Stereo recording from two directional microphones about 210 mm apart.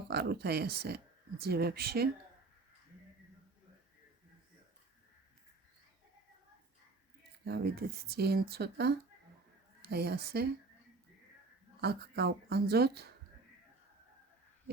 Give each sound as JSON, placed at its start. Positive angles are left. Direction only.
{"t": 0.1, "sound": "speech", "side_deg": -50}
{"t": 7.4, "sound": "speech", "side_deg": -50}
{"t": 11.8, "sound": "speech", "side_deg": -50}